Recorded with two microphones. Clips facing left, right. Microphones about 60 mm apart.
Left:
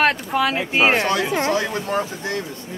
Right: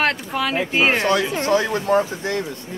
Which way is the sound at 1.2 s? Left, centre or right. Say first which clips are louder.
Right 1 dB; left.